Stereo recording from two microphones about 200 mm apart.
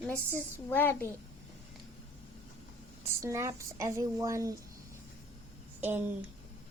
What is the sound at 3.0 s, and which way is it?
Speech, 15° right (ahead or behind).